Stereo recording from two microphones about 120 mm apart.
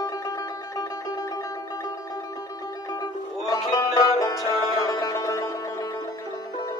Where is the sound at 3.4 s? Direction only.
30° left (ahead or behind).